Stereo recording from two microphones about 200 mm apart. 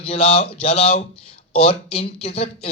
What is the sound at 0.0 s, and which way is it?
A man's voice, 30° left (ahead or behind).